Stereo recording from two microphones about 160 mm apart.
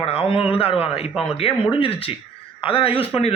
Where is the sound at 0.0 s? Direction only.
35° left (ahead or behind).